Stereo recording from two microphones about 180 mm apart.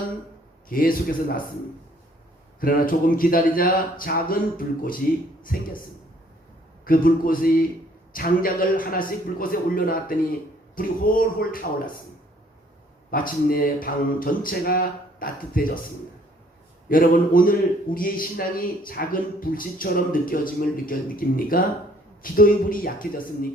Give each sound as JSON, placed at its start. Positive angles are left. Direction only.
{"t": 0.7, "sound": "a man's voice", "side_deg": 50}
{"t": 2.6, "sound": "a man's voice", "side_deg": 50}
{"t": 6.8, "sound": "a man's voice", "side_deg": 50}
{"t": 13.1, "sound": "a man's voice", "side_deg": 50}
{"t": 16.9, "sound": "a man's voice", "side_deg": 50}